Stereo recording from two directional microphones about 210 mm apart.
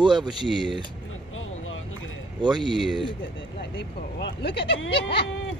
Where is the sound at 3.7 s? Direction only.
55° left (ahead or behind).